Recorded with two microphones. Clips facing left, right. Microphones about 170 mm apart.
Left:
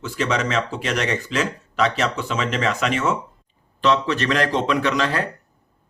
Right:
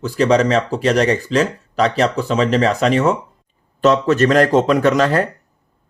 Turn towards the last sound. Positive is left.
turn(degrees=-45)  # may be behind; listen again after turning